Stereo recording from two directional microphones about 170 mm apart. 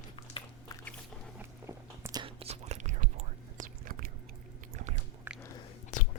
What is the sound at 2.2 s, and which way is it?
Whispering, 35° right (ahead or behind).